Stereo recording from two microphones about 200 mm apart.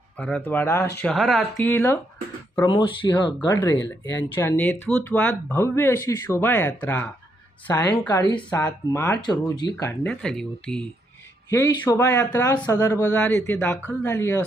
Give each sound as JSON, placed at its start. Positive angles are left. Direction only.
{"t": 0.2, "sound": "speech", "side_deg": 5}
{"t": 1.0, "sound": "speech", "side_deg": 0}
{"t": 2.6, "sound": "speech", "side_deg": 20}
{"t": 8.0, "sound": "speech", "side_deg": 20}
{"t": 9.8, "sound": "speech", "side_deg": 10}
{"t": 11.4, "sound": "speech", "side_deg": 15}